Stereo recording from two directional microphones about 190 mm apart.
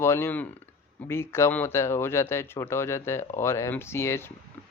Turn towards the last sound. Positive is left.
turn(degrees=15)  # may be behind; listen again after turning